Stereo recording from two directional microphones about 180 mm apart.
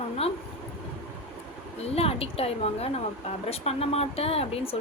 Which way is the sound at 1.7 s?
35° left (ahead or behind).